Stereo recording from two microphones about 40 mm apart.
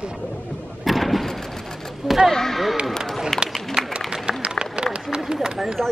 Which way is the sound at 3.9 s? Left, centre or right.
Right.